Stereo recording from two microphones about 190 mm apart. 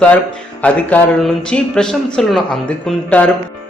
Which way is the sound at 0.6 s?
5° left (ahead or behind).